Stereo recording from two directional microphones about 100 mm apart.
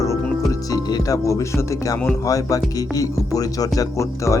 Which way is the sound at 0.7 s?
35° left (ahead or behind).